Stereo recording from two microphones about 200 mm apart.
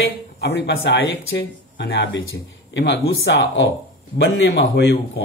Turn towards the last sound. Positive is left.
turn(degrees=60)  # may be behind; listen again after turning